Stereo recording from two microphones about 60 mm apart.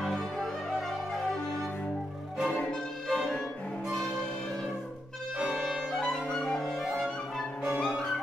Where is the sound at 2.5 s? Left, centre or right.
Centre.